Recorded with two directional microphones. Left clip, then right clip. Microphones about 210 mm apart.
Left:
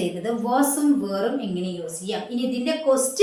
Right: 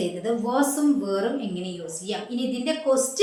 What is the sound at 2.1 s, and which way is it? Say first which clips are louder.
Speech: left 2 dB; centre (ahead or behind).